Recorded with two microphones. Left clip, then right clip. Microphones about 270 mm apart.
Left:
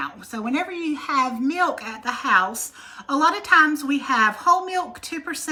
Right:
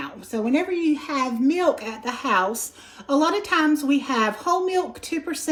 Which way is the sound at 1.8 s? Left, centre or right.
Right.